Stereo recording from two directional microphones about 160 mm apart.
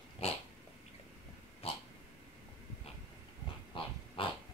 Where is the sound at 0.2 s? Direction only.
40° left (ahead or behind).